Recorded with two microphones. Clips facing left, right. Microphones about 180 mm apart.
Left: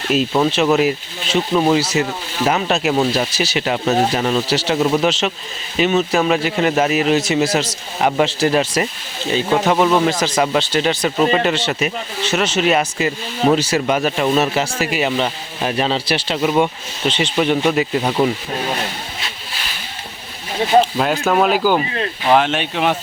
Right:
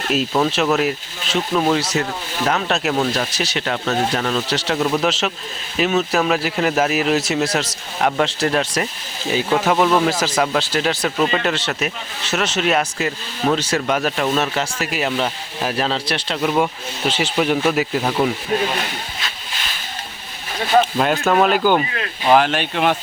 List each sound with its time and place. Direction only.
0.1 s speech: centre (ahead or behind)
21.0 s speech: centre (ahead or behind)